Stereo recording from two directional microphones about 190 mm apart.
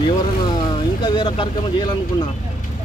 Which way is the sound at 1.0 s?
25° left (ahead or behind).